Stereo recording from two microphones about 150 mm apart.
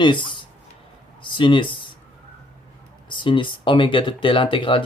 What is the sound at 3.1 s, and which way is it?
Speech, 35° left (ahead or behind).